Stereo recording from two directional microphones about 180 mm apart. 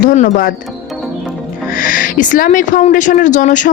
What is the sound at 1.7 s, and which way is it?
Speech, 50° left (ahead or behind).